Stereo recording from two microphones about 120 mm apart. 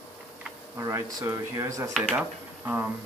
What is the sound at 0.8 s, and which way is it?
Speech, 25° right (ahead or behind).